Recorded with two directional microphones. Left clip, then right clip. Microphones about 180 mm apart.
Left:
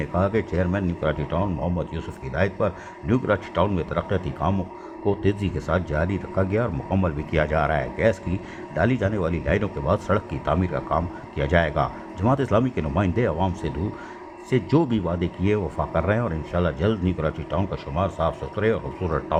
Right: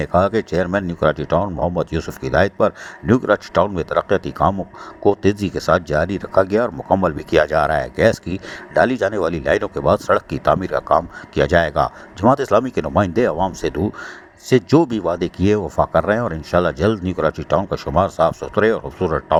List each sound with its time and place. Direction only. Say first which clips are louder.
0.0 s speech: right 7 dB; 35° right (ahead or behind)